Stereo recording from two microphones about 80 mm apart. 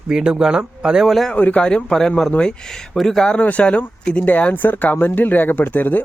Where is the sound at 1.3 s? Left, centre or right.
Centre.